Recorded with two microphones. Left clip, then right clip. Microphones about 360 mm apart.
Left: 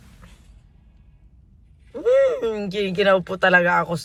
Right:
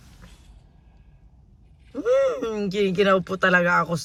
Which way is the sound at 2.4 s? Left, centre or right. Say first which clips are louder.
Even; centre.